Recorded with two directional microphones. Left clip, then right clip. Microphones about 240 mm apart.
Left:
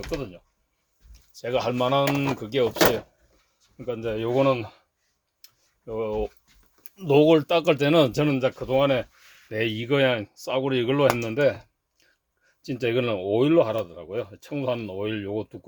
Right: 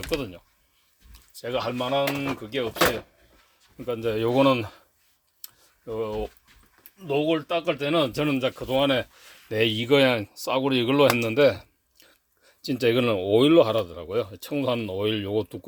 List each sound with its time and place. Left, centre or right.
0.1 s speech: right
1.1 s a sound: centre
1.5 s speech: centre
2.1 s speech: centre
3.8 s speech: centre
5.4 s tick-tock: centre
6.8 s speech: left
8.3 s speech: centre
11.2 s a sound: right
12.5 s speech: right